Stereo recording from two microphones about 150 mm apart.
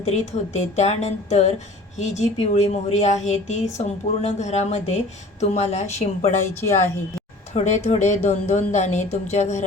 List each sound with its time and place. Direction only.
0.0 s speech: 50° left (ahead or behind)
6.5 s a woman's voice: 15° left (ahead or behind)
7.5 s speech: 50° left (ahead or behind)